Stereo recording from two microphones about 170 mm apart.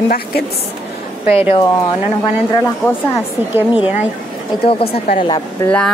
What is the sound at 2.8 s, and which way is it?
Speech, 10° left (ahead or behind).